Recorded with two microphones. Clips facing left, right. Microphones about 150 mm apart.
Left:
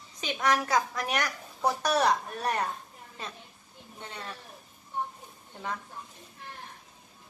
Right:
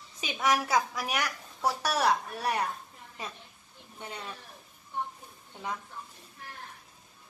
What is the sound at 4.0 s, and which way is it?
Speech, 10° right (ahead or behind).